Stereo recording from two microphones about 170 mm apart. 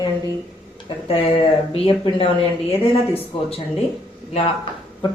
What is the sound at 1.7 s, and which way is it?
Speech, 35° left (ahead or behind).